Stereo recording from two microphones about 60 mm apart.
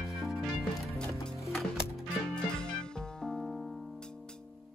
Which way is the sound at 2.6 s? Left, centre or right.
Centre.